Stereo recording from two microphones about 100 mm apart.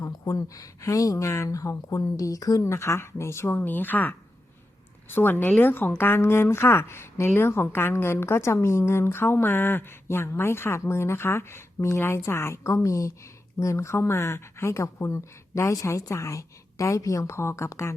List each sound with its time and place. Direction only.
0.0 s a woman's voice: 35° left (ahead or behind)